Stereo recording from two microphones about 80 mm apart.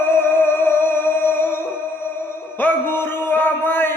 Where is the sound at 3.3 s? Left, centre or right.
Left.